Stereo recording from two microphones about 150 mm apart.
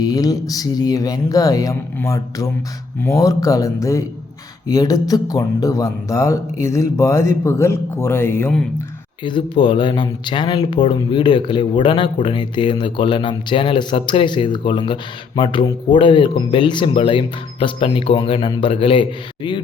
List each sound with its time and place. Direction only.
0.0 s speech: 25° left (ahead or behind)
9.2 s speech: 35° left (ahead or behind)